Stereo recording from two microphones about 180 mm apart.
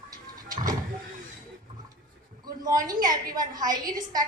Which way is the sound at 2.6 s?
20° right (ahead or behind).